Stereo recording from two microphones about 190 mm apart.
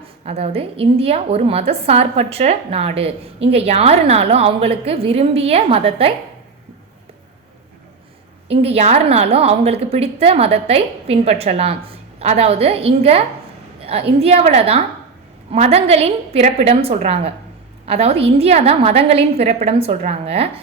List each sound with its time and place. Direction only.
0.3 s a woman's voice: 30° right (ahead or behind)
8.4 s a woman's voice: 30° right (ahead or behind)